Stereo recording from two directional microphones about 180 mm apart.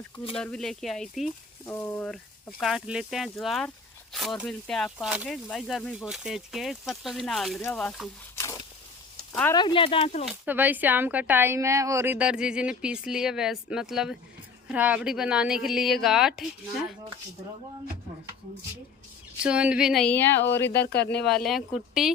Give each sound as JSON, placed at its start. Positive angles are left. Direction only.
{"t": 0.3, "sound": "speech", "side_deg": 5}
{"t": 1.6, "sound": "speech", "side_deg": 15}
{"t": 2.6, "sound": "speech", "side_deg": -5}
{"t": 9.3, "sound": "speech", "side_deg": 10}
{"t": 9.6, "sound": "speech", "side_deg": 25}
{"t": 10.2, "sound": "a woman's voice", "side_deg": -10}
{"t": 19.4, "sound": "speech", "side_deg": -5}
{"t": 20.7, "sound": "speech", "side_deg": 65}
{"t": 21.0, "sound": "speech", "side_deg": 5}